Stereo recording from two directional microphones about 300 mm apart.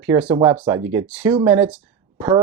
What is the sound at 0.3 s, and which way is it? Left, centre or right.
Speech, centre.